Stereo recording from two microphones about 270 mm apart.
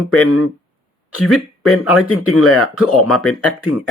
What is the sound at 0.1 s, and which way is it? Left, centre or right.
Speech, left.